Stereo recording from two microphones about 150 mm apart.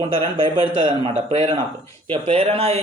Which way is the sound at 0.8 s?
40° right (ahead or behind).